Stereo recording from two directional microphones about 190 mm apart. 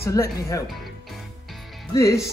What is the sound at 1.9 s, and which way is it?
Speech, 15° left (ahead or behind).